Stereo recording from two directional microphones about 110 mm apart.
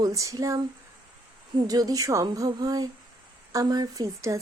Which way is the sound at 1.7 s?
35° right (ahead or behind).